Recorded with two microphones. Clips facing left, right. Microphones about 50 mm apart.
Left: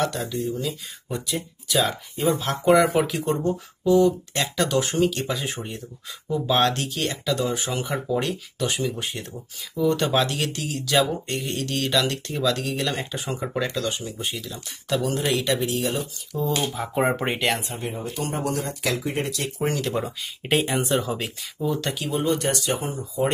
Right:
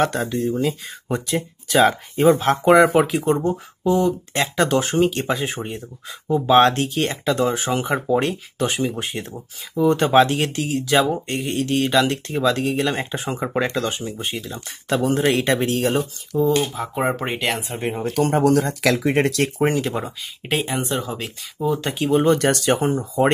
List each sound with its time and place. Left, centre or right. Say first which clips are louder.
0.0 s speech: right 5 dB; right
3.0 s speech: right 5 dB; right
16.4 s speech: right 3 dB; centre
17.6 s speech: right 6 dB; right
17.9 s speech: right 11 dB; right
19.6 s speech: right 1 dB; right
20.4 s speech: even; centre
22.1 s speech: right 7 dB; right